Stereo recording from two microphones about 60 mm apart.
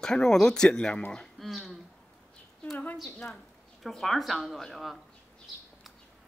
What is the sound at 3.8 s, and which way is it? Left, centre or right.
Speech, centre.